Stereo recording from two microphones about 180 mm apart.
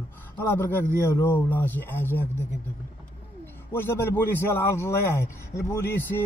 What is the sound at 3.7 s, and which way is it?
Speech, 10° left (ahead or behind).